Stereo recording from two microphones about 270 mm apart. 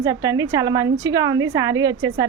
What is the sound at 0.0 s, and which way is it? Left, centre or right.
A woman's voice, centre.